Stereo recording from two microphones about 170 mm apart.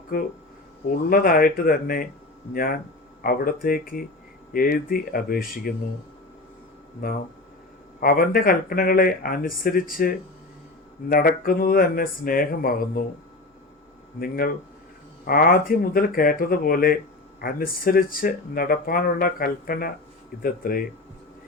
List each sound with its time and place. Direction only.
0.1 s speech: 60° left (ahead or behind)
7.0 s speech: 55° left (ahead or behind)
14.2 s speech: 60° left (ahead or behind)